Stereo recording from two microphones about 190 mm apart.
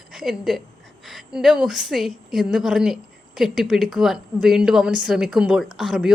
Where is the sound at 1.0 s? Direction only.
Centre (ahead or behind).